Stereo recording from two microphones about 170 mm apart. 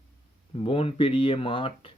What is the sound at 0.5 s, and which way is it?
Speech, 30° left (ahead or behind).